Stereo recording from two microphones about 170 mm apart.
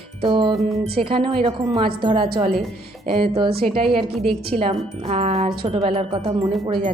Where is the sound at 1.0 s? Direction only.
30° right (ahead or behind).